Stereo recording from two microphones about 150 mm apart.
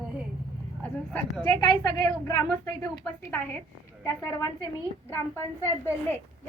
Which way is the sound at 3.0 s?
15° left (ahead or behind).